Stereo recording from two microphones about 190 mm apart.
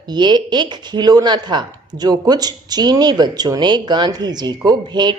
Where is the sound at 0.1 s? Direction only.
25° right (ahead or behind).